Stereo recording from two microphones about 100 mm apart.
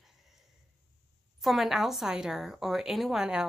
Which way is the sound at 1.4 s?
Centre (ahead or behind).